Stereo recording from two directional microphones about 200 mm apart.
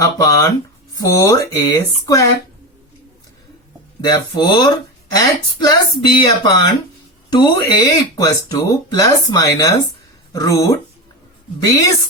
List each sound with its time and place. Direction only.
0.0 s speech: 15° left (ahead or behind)
4.0 s speech: 20° left (ahead or behind)